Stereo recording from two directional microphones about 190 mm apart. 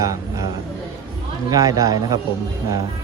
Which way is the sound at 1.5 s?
20° right (ahead or behind).